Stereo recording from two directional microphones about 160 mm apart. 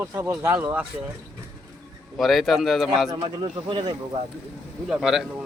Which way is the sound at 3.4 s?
30° right (ahead or behind).